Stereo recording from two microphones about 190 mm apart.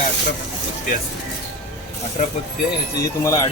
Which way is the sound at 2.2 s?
45° left (ahead or behind).